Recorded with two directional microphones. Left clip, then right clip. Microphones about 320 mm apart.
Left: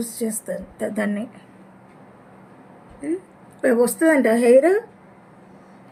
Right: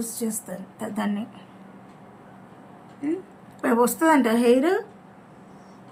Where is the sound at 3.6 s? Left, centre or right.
Right.